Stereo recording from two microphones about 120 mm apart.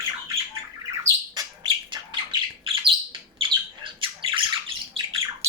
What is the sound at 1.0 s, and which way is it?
Bird, 30° right (ahead or behind).